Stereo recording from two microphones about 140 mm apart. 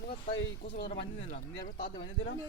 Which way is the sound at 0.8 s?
50° left (ahead or behind).